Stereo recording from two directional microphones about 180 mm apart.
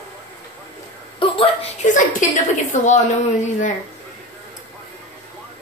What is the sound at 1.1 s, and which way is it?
A woman's voice, 30° left (ahead or behind).